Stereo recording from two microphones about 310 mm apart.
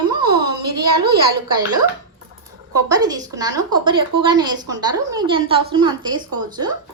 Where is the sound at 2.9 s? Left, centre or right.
Centre.